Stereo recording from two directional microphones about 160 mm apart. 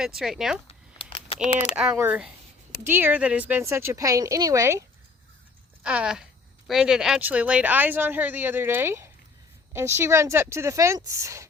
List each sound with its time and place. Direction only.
0.0 s speech: centre (ahead or behind)
1.0 s a sound: 35° left (ahead or behind)
1.7 s speech: 5° right (ahead or behind)
5.8 s speech: 5° right (ahead or behind)